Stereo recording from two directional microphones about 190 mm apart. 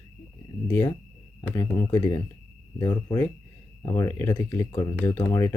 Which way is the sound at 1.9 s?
20° left (ahead or behind).